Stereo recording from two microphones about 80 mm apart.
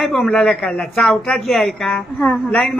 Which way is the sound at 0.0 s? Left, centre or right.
Centre.